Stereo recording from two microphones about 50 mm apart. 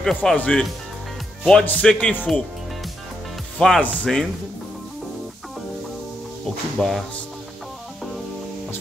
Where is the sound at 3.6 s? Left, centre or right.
Centre.